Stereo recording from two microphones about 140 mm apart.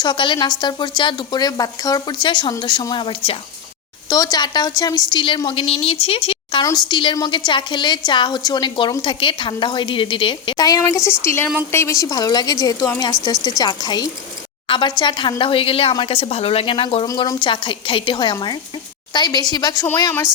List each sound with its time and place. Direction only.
0.0 s a woman's voice: 35° left (ahead or behind)